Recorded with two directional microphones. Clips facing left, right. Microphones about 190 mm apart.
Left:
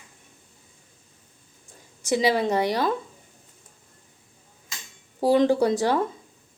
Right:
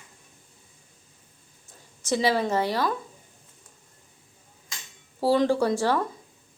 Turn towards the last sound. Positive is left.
turn(degrees=15)  # may be behind; listen again after turning